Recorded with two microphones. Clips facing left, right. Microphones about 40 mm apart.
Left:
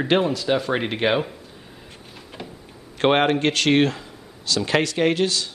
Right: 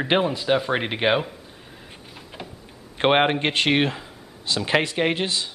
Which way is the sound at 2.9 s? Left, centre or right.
Centre.